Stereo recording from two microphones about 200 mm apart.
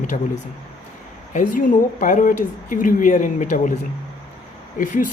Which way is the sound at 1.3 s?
40° left (ahead or behind).